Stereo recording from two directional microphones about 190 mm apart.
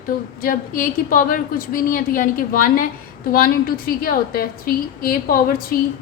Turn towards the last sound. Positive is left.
turn(degrees=50)  # may be behind; listen again after turning